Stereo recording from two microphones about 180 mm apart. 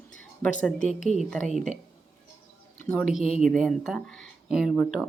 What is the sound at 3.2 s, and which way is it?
Speech, 35° left (ahead or behind).